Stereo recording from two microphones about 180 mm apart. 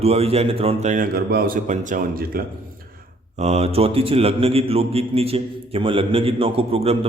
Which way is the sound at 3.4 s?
35° right (ahead or behind).